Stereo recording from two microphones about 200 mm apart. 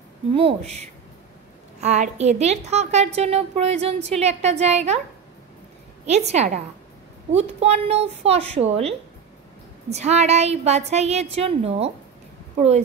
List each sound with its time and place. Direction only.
0.3 s a woman's voice: 30° right (ahead or behind)
6.0 s a woman's voice: 35° right (ahead or behind)